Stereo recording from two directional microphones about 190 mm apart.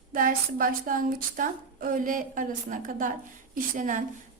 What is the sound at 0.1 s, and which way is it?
A woman's voice, 45° right (ahead or behind).